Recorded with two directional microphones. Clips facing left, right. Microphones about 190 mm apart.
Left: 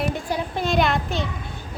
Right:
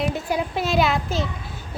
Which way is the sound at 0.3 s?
5° right (ahead or behind).